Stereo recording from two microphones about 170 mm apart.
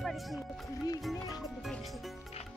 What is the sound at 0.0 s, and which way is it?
Music, centre (ahead or behind).